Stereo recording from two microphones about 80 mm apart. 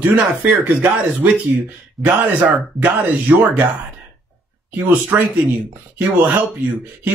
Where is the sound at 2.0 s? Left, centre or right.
Right.